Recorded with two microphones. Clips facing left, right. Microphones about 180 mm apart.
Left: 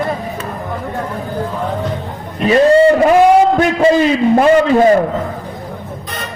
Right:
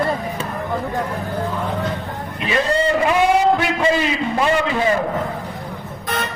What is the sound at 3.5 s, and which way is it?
A man's voice, 45° left (ahead or behind).